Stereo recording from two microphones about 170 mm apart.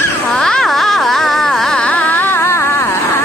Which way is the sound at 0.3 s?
5° left (ahead or behind).